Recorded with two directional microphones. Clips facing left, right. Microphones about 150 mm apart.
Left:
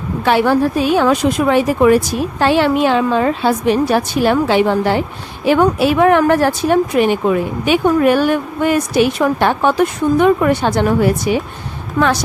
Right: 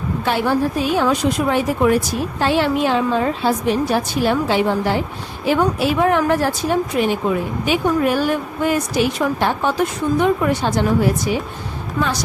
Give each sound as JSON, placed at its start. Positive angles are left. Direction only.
{"t": 0.3, "sound": "a woman's voice", "side_deg": 75}
{"t": 2.4, "sound": "a woman's voice", "side_deg": 75}
{"t": 12.0, "sound": "a woman's voice", "side_deg": 50}